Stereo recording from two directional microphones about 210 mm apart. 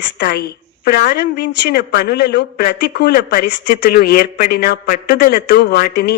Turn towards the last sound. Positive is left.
turn(degrees=50)  # may be behind; listen again after turning